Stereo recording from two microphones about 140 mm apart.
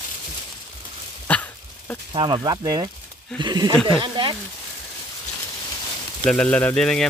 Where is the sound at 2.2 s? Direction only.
30° right (ahead or behind).